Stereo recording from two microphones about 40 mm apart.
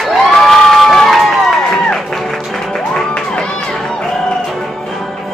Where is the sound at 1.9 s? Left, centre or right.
Centre.